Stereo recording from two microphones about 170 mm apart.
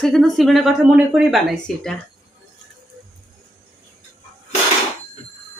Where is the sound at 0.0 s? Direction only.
Centre (ahead or behind).